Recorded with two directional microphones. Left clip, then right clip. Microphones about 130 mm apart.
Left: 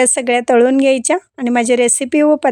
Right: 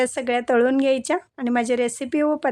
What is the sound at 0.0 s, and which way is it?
Speech, 55° left (ahead or behind).